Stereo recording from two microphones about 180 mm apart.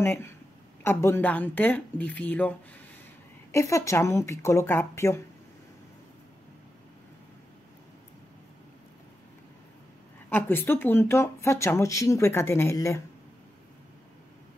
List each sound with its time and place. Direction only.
0.0 s speech: 15° left (ahead or behind)
3.5 s speech: 15° left (ahead or behind)
10.3 s speech: 10° left (ahead or behind)